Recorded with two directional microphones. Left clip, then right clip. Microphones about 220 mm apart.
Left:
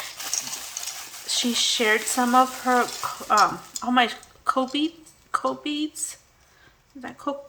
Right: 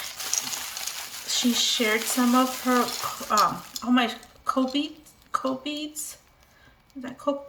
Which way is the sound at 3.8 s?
15° left (ahead or behind).